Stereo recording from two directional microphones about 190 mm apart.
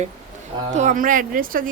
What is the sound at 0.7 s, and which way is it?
Speech, 40° right (ahead or behind).